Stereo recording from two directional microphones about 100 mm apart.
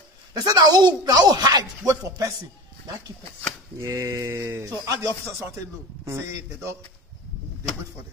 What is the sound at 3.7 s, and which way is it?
Speech, 30° right (ahead or behind).